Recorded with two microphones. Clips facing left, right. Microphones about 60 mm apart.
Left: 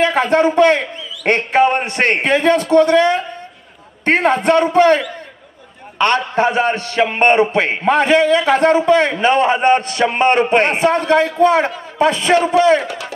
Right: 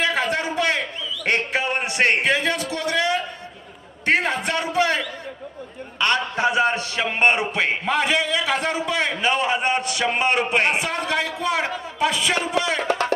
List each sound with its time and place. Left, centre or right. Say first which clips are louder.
0.0 s a man's voice: left 9 dB; left
12.8 s speech: right 4 dB; right